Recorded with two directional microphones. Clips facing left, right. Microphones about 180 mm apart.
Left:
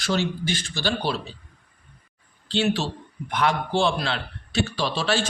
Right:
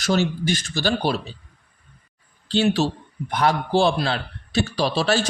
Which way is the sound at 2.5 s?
40° right (ahead or behind).